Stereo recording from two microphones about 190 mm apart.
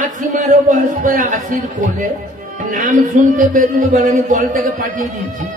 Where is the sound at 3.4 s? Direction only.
40° right (ahead or behind).